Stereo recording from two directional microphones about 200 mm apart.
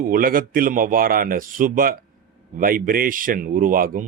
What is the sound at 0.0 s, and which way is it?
Speech, 45° right (ahead or behind).